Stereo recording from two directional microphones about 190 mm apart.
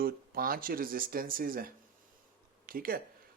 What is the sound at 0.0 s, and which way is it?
Speech, 50° right (ahead or behind).